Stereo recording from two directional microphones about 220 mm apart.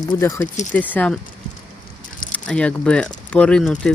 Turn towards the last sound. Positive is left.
turn(degrees=5)  # may be behind; listen again after turning